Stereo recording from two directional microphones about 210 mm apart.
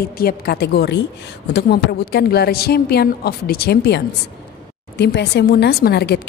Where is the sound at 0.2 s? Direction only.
45° left (ahead or behind).